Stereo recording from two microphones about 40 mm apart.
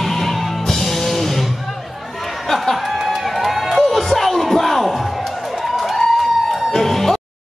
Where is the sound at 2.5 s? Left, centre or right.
Centre.